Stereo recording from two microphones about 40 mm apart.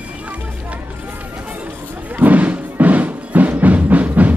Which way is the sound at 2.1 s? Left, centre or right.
Right.